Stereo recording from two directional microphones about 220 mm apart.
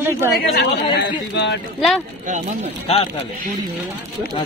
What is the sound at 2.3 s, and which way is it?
Speech, 35° right (ahead or behind).